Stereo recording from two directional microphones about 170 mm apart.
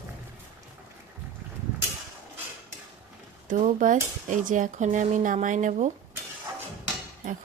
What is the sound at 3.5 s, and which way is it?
A woman's voice, 50° right (ahead or behind).